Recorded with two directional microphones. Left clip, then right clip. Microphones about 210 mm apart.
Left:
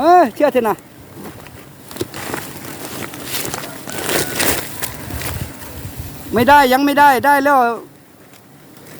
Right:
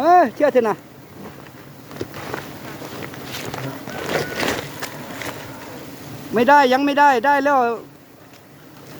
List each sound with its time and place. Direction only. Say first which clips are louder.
0.0 s speech: left 3 dB; 45° left (ahead or behind)
1.9 s a sound: left 4 dB; 55° left (ahead or behind)
4.1 s vehicle: left 3 dB; 45° left (ahead or behind)
6.3 s speech: left 3 dB; 45° left (ahead or behind)